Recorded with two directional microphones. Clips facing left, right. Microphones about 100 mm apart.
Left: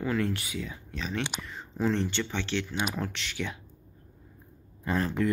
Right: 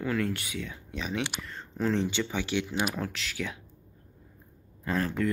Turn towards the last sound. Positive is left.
turn(degrees=5)  # may be behind; listen again after turning